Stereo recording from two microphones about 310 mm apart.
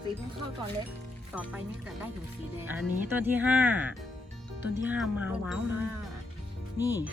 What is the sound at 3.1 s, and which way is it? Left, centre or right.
Speech, centre.